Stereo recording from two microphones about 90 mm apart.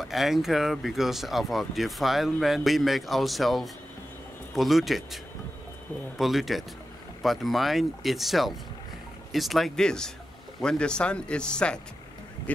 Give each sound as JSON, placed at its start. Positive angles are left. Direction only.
{"t": 0.0, "sound": "speech", "side_deg": 0}